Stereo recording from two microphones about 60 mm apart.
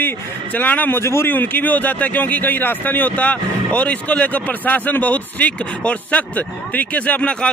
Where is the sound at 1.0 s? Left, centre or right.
Left.